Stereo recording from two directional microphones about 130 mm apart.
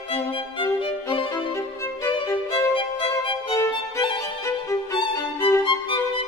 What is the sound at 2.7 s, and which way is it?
Music, 40° left (ahead or behind).